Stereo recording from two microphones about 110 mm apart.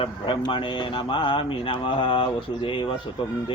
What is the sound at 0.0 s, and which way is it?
Speech, 50° left (ahead or behind).